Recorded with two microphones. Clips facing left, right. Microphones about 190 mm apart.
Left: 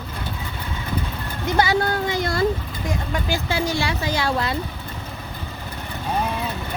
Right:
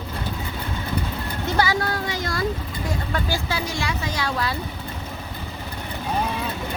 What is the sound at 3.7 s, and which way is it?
Speech, 30° left (ahead or behind).